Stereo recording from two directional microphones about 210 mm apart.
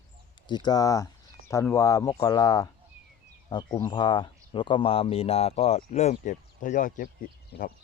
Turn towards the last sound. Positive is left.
turn(degrees=45)  # may be behind; listen again after turning